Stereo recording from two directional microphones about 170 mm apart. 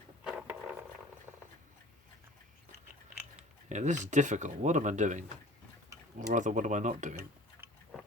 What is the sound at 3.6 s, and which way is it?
Speech, 45° right (ahead or behind).